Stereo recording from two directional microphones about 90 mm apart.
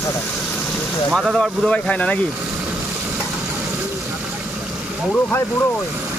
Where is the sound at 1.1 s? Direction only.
5° right (ahead or behind).